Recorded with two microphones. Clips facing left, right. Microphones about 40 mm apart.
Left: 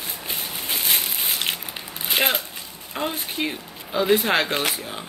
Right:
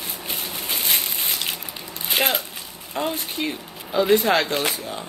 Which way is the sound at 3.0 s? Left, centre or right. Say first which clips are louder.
Right 1 dB; centre.